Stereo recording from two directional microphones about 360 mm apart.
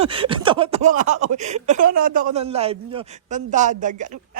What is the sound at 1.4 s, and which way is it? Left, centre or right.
Speech, centre.